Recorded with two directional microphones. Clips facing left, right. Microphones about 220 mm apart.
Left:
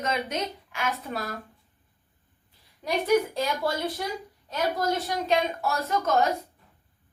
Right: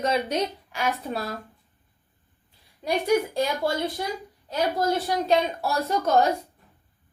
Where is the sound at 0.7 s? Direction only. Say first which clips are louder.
Right 3 dB; 35° right (ahead or behind).